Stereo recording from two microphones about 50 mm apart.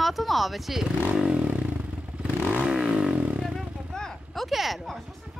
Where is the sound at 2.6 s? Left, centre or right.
Centre.